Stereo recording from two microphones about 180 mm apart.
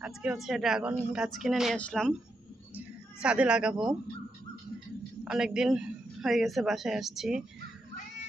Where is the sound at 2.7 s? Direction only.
5° right (ahead or behind).